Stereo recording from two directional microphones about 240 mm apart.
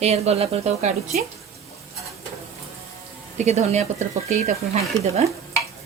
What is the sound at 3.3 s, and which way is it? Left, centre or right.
Speech, right.